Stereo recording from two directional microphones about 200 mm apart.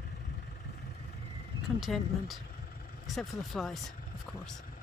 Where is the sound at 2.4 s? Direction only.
50° left (ahead or behind).